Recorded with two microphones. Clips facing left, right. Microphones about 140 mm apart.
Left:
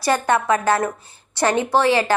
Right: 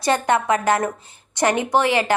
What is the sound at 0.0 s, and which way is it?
A woman's voice, 20° right (ahead or behind).